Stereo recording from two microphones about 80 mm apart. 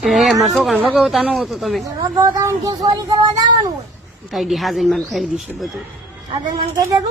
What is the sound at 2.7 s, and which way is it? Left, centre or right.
Speech, right.